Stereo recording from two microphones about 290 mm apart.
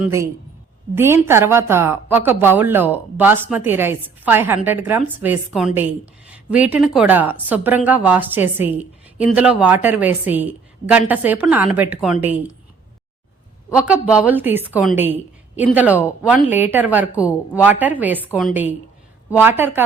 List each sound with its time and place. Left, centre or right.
0.0 s a woman's voice: centre
13.7 s a woman's voice: centre